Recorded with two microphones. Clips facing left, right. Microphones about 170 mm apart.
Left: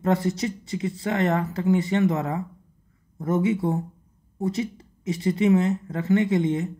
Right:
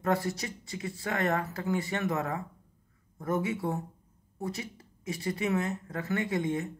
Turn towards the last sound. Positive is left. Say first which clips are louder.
# left 8 dB
turn(degrees=20)  # may be behind; listen again after turning